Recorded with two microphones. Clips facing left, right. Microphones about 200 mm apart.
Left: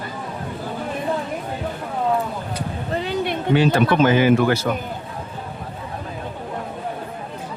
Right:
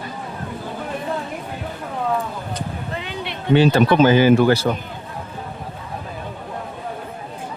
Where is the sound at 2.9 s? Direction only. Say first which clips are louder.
Left 7 dB; 40° left (ahead or behind).